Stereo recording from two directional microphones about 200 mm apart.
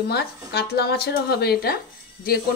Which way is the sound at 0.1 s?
55° left (ahead or behind).